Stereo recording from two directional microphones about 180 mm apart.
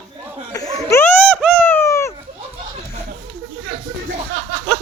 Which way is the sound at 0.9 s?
15° left (ahead or behind).